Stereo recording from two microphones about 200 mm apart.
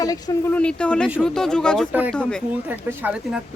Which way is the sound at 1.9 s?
10° right (ahead or behind).